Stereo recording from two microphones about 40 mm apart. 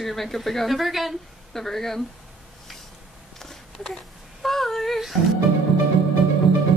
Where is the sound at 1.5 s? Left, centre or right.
Centre.